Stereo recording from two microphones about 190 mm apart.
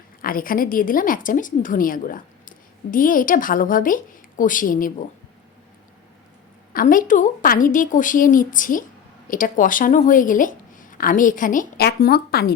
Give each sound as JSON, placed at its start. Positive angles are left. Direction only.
{"t": 0.2, "sound": "speech", "side_deg": 50}
{"t": 6.7, "sound": "speech", "side_deg": 45}